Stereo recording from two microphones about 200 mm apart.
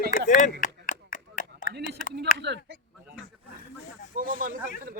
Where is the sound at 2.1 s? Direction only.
60° right (ahead or behind).